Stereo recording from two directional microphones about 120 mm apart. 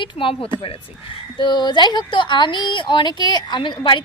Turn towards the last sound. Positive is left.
turn(degrees=45)  # may be behind; listen again after turning